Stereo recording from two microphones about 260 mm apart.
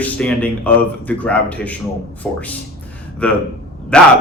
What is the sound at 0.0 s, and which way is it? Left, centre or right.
A man's voice, centre.